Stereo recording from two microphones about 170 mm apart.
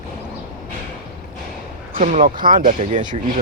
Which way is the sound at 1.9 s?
50° right (ahead or behind).